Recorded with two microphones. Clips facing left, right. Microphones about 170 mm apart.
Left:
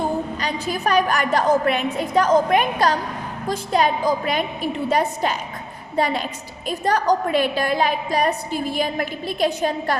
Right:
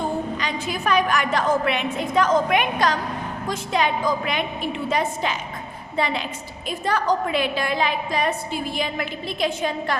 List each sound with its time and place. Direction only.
0.3 s a woman's voice: 40° left (ahead or behind)